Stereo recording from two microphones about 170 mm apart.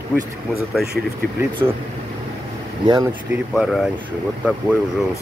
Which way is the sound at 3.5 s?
Centre (ahead or behind).